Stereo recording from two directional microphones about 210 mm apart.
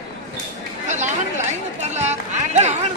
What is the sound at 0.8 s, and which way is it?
Chatter, 35° right (ahead or behind).